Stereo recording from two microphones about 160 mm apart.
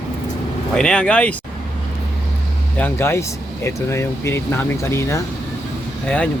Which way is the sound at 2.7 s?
15° left (ahead or behind).